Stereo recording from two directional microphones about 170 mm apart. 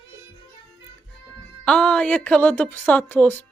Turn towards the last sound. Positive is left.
turn(degrees=10)  # may be behind; listen again after turning